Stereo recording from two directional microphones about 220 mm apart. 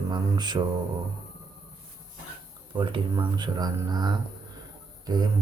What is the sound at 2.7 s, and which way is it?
Speech, 20° right (ahead or behind).